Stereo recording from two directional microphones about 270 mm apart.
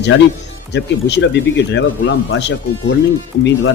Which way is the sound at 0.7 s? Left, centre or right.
Left.